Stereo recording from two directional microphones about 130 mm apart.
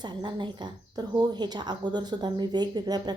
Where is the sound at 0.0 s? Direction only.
35° right (ahead or behind).